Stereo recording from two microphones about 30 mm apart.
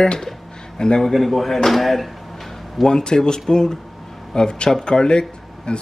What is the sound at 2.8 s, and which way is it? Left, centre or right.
Speech, left.